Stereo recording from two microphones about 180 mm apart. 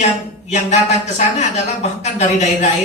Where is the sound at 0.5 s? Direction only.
40° left (ahead or behind).